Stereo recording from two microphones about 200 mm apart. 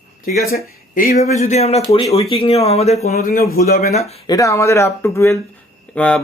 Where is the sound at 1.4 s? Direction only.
35° left (ahead or behind).